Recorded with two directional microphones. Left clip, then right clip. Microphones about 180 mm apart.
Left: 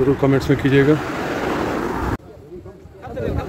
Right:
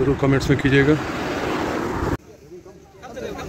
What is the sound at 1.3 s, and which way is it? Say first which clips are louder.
Vehicle: left 2 dB; 55° left (ahead or behind).